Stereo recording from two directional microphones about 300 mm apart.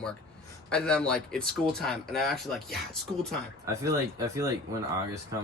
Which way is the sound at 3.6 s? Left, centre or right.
Centre.